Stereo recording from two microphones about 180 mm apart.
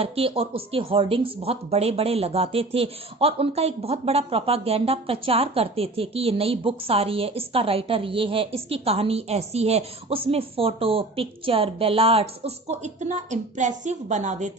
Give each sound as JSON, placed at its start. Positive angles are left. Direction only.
{"t": 0.0, "sound": "speech", "side_deg": -30}